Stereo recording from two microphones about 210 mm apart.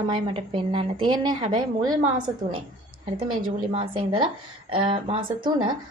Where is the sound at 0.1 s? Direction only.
25° right (ahead or behind).